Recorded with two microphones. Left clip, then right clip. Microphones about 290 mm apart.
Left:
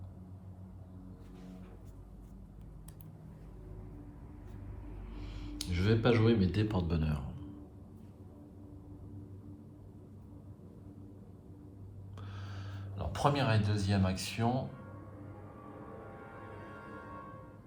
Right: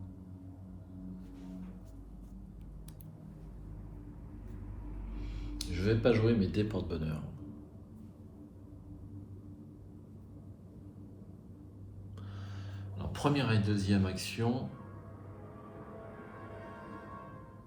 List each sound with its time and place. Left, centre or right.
5.1 s music: left
13.0 s a man's voice: left